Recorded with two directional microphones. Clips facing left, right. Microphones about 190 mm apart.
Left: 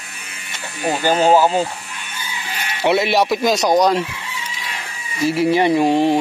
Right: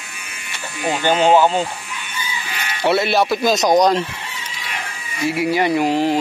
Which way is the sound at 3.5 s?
15° right (ahead or behind).